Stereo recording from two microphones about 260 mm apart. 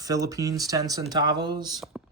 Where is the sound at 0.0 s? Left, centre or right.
Centre.